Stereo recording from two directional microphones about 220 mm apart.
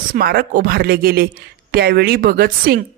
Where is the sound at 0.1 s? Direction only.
45° right (ahead or behind).